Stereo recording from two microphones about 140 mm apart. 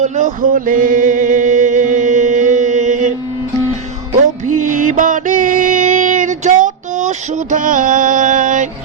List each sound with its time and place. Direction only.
0.0 s music: 65° right (ahead or behind)
4.4 s music: 65° right (ahead or behind)